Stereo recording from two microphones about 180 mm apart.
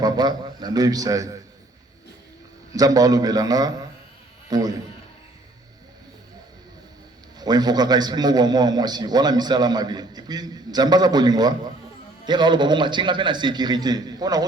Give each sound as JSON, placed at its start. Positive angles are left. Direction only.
{"t": 0.0, "sound": "a man's voice", "side_deg": -25}
{"t": 2.7, "sound": "a man's voice", "side_deg": -20}
{"t": 7.3, "sound": "a man's voice", "side_deg": -25}